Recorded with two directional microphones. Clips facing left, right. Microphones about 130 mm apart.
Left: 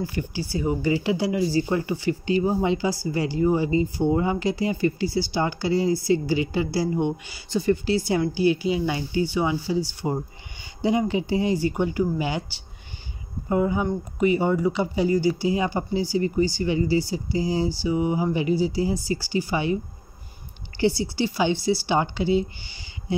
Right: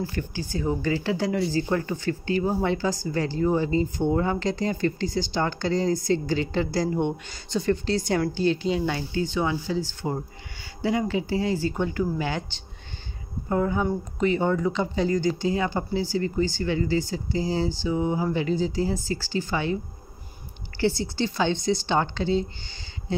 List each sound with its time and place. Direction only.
0.0 s speech: 10° left (ahead or behind)
20.8 s speech: 10° left (ahead or behind)